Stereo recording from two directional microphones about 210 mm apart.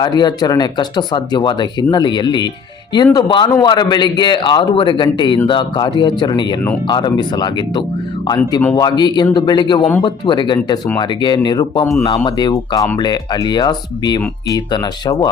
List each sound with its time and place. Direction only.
0.0 s speech: 20° left (ahead or behind)